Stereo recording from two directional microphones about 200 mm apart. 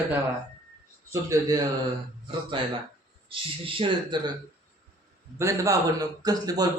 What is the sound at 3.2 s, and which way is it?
A man's voice, 25° right (ahead or behind).